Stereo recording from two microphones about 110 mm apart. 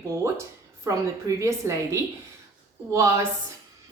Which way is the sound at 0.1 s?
25° right (ahead or behind).